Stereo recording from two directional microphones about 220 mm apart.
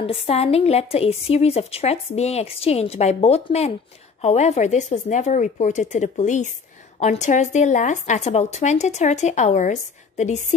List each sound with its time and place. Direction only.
0.0 s a woman's voice: 25° left (ahead or behind)